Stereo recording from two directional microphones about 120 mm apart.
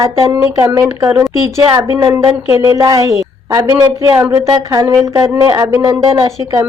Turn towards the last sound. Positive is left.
turn(degrees=-30)  # may be behind; listen again after turning